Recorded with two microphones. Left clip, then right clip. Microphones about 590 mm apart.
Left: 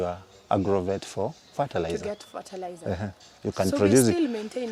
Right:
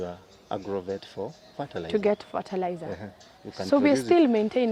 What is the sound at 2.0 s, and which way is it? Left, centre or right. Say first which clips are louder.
Speech: right 8 dB; right.